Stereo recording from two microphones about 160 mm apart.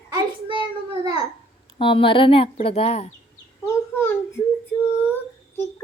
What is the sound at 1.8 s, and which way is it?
A woman's voice, 30° left (ahead or behind).